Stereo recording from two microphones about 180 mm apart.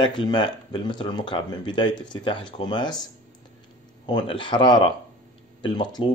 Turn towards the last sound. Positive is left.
turn(degrees=25)  # may be behind; listen again after turning